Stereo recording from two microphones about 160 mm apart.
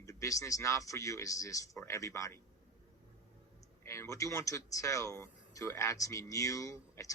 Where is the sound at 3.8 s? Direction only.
20° left (ahead or behind).